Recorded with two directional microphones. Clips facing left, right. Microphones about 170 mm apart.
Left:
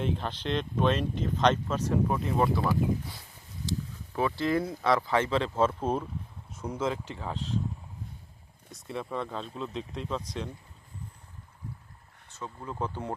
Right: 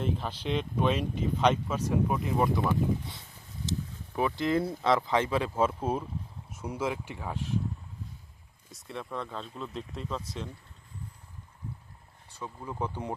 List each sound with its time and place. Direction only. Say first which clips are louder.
0.0 s speech: left 1 dB; 5° right (ahead or behind)
3.7 s a sound: left 1 dB; 20° right (ahead or behind)
4.4 s speech: even; 20° right (ahead or behind)
8.7 s speech: left 3 dB; centre (ahead or behind)
12.3 s speech: even; 15° right (ahead or behind)